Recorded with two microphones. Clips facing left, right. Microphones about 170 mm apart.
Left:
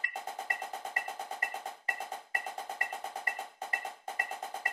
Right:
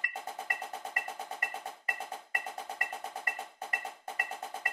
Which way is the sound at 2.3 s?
25° left (ahead or behind).